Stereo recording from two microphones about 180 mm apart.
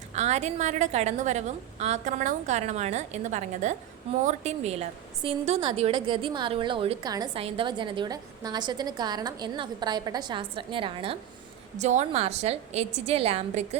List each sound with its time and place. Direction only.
0.1 s a woman's voice: 40° right (ahead or behind)
11.8 s a woman's voice: 40° right (ahead or behind)